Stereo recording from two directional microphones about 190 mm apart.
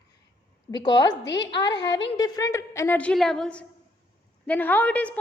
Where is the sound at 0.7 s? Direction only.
25° left (ahead or behind).